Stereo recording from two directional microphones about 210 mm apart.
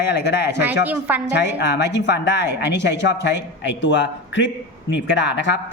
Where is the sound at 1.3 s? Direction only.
55° left (ahead or behind).